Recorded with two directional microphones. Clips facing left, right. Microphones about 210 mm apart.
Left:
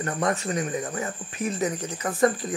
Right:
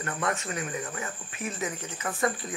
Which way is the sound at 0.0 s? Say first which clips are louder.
Left 5 dB; 35° left (ahead or behind).